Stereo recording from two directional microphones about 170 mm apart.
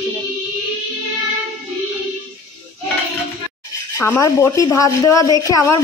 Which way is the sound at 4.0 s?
15° left (ahead or behind).